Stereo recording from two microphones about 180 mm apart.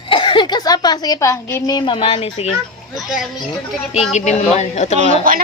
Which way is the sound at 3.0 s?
Centre (ahead or behind).